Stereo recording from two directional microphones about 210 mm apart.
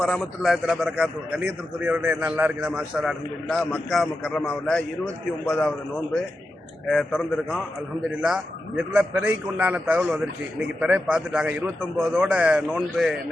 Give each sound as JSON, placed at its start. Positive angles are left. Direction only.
{"t": 0.0, "sound": "a man's voice", "side_deg": 0}
{"t": 6.8, "sound": "a man's voice", "side_deg": 5}
{"t": 8.9, "sound": "a man's voice", "side_deg": -5}